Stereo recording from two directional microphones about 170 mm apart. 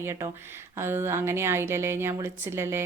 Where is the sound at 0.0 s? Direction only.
15° right (ahead or behind).